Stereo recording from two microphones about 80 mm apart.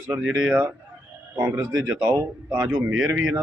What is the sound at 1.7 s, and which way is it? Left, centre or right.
A man's voice, centre.